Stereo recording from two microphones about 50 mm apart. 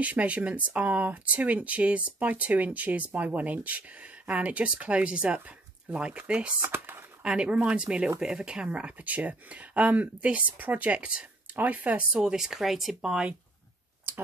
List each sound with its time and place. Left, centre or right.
0.0 s speech: right
6.7 s a sound: right
7.2 s speech: right
8.6 s speech: right
12.2 s speech: centre